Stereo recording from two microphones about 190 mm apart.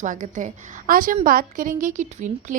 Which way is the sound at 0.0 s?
40° right (ahead or behind).